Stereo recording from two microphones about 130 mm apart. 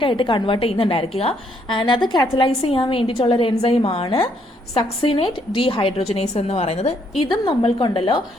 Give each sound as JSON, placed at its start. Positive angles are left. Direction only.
{"t": 0.0, "sound": "a woman's voice", "side_deg": 40}
{"t": 7.2, "sound": "a woman's voice", "side_deg": 45}